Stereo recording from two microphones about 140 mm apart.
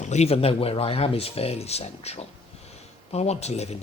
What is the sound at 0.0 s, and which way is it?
Speech, 55° left (ahead or behind).